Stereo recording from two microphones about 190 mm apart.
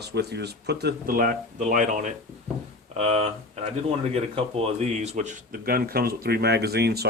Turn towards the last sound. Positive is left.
turn(degrees=-60)  # may be behind; listen again after turning